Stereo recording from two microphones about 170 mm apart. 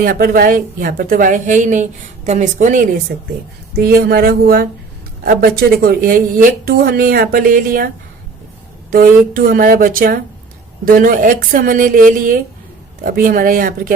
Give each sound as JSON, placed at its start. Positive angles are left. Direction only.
{"t": 0.0, "sound": "a woman's voice", "side_deg": -60}
{"t": 3.1, "sound": "speech", "side_deg": -65}
{"t": 8.9, "sound": "speech", "side_deg": -55}